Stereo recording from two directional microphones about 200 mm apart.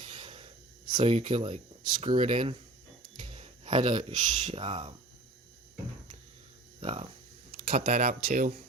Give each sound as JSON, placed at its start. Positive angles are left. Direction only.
{"t": 0.0, "sound": "wheeze", "side_deg": -25}
{"t": 0.9, "sound": "speech", "side_deg": -25}
{"t": 6.7, "sound": "speech", "side_deg": -25}